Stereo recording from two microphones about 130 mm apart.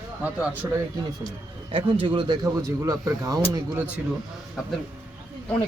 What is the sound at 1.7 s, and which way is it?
Speech, 40° right (ahead or behind).